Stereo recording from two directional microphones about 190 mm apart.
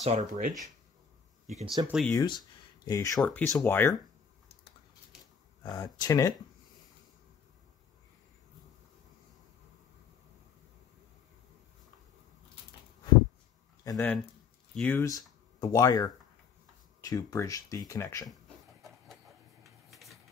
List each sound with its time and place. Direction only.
0.0 s speech: 35° right (ahead or behind)
1.9 s speech: centre (ahead or behind)
2.1 s speech: 25° left (ahead or behind)
3.2 s speech: centre (ahead or behind)
5.6 s speech: 20° left (ahead or behind)
13.8 s speech: 10° left (ahead or behind)
19.9 s a sound: centre (ahead or behind)